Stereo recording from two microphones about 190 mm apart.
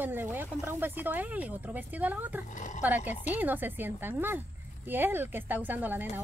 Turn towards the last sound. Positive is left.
turn(degrees=-10)  # may be behind; listen again after turning